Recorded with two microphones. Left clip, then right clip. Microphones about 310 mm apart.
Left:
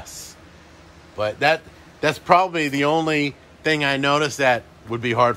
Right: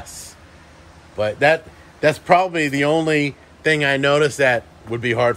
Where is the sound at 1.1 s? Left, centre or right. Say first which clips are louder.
Right 3 dB; centre.